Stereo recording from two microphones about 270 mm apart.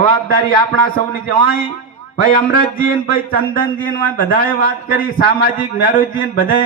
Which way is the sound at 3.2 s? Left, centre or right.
Left.